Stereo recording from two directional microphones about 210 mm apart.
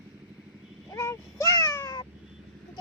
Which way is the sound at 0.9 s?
15° left (ahead or behind).